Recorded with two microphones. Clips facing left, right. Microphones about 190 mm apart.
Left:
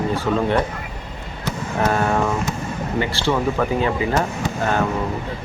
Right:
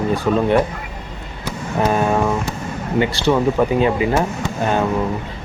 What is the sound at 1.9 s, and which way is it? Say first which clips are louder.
Speech: right 3 dB; 15° right (ahead or behind).